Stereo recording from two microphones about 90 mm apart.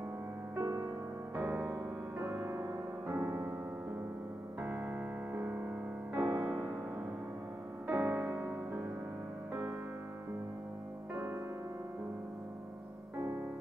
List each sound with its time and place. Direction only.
0.6 s music: 30° right (ahead or behind)
6.2 s music: 35° right (ahead or behind)
6.5 s music: 15° right (ahead or behind)
7.8 s music: 25° right (ahead or behind)
9.5 s music: 35° right (ahead or behind)
11.1 s music: 25° right (ahead or behind)